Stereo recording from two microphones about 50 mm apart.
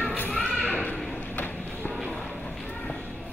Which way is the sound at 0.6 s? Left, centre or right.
Left.